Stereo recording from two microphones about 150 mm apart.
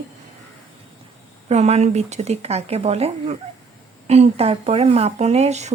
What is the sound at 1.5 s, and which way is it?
Speech, 45° right (ahead or behind).